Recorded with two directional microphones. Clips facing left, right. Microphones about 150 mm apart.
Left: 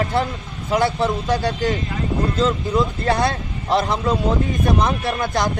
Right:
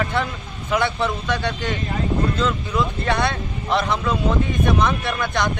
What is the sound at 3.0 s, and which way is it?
A man's voice, 35° left (ahead or behind).